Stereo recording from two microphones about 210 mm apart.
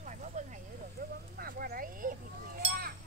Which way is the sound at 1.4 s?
45° right (ahead or behind).